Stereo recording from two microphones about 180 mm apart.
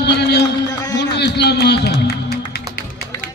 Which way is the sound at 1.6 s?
65° left (ahead or behind).